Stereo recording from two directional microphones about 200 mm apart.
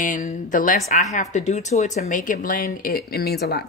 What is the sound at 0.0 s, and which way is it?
Speech, 40° left (ahead or behind).